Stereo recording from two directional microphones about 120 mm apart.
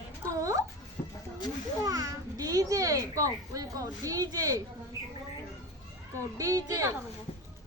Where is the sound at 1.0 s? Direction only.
55° left (ahead or behind).